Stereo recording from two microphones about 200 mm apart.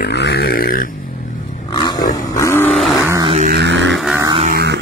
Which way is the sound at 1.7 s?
20° left (ahead or behind).